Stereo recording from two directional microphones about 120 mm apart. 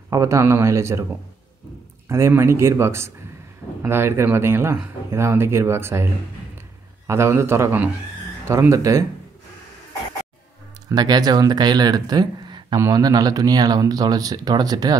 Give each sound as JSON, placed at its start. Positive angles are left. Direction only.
{"t": 0.1, "sound": "speech", "side_deg": -25}
{"t": 2.0, "sound": "speech", "side_deg": -25}
{"t": 7.1, "sound": "speech", "side_deg": -20}
{"t": 10.9, "sound": "speech", "side_deg": -35}